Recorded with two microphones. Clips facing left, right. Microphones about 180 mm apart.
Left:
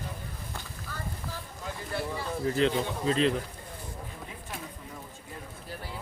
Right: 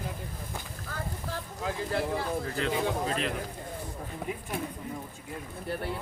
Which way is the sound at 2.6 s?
25° left (ahead or behind).